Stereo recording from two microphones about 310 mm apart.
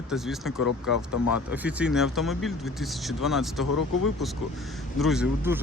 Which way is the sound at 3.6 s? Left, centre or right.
Left.